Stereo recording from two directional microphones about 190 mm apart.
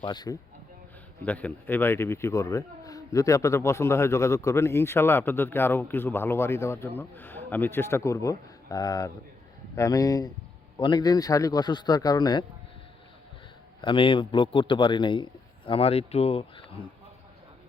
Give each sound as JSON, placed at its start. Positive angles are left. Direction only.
{"t": 0.0, "sound": "a man's voice", "side_deg": 20}
{"t": 1.2, "sound": "a man's voice", "side_deg": 10}
{"t": 13.8, "sound": "a man's voice", "side_deg": 25}